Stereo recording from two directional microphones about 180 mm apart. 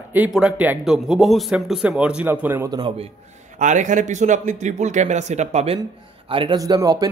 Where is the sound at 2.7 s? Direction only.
30° right (ahead or behind).